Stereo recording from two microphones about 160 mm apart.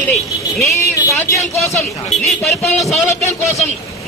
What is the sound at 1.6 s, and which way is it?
Speech, 15° left (ahead or behind).